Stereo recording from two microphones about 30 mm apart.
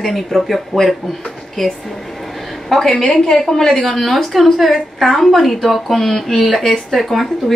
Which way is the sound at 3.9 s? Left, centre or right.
Centre.